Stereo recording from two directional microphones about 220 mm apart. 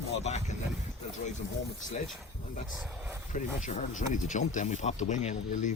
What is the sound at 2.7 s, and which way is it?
Speech, 5° right (ahead or behind).